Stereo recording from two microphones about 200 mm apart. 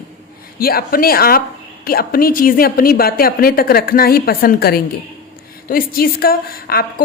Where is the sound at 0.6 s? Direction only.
50° left (ahead or behind).